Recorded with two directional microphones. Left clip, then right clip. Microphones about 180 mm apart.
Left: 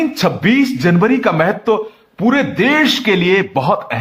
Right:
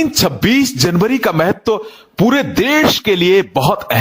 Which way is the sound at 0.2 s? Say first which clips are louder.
Even; 40° right (ahead or behind).